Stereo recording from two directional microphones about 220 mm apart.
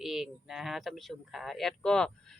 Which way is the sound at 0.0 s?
Centre (ahead or behind).